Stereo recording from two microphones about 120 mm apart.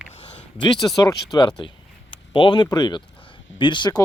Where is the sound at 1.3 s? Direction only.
30° left (ahead or behind).